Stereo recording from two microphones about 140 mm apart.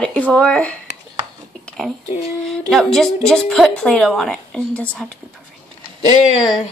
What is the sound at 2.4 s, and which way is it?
A woman's voice, centre (ahead or behind).